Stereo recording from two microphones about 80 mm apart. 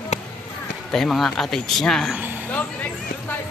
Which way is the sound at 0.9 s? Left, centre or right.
Centre.